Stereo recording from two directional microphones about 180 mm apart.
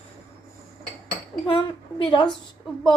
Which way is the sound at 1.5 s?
30° left (ahead or behind).